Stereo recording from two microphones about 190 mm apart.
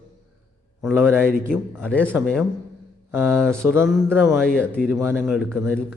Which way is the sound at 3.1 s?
10° right (ahead or behind).